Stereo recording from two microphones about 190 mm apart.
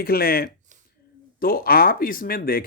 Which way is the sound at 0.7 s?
40° right (ahead or behind).